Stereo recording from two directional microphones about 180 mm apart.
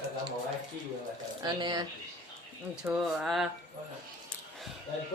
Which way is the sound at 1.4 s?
25° right (ahead or behind).